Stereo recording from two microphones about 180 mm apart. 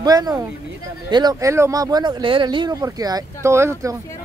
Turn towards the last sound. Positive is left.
turn(degrees=-15)  # may be behind; listen again after turning